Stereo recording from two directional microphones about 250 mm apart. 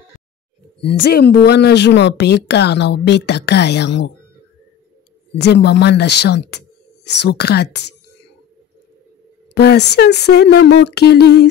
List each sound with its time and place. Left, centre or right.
0.8 s speech: left
5.4 s speech: left
9.5 s a sound: left